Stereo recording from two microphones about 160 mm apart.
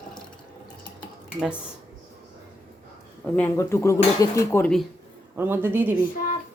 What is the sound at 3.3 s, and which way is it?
Speech, 15° left (ahead or behind).